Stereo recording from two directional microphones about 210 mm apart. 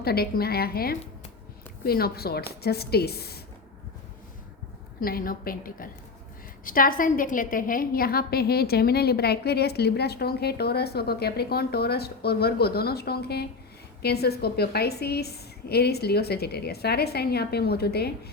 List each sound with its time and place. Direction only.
0.0 s a woman's voice: 50° left (ahead or behind)
4.9 s a woman's voice: 45° left (ahead or behind)